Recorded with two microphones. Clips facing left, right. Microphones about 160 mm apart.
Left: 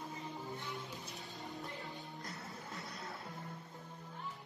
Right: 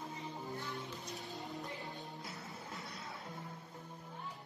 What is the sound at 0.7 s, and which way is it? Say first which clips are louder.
Music: right 1 dB; centre (ahead or behind).